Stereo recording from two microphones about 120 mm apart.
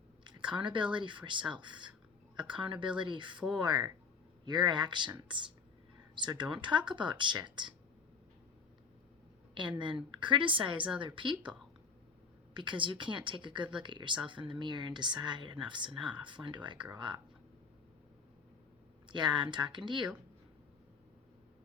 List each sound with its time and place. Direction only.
0.3 s a sound: 40° right (ahead or behind)
0.9 s speech: 40° right (ahead or behind)
9.6 s a woman's voice: 40° right (ahead or behind)
12.5 s speech: 40° right (ahead or behind)
19.1 s speech: 40° right (ahead or behind)